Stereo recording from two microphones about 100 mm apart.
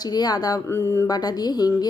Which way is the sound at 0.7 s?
30° left (ahead or behind).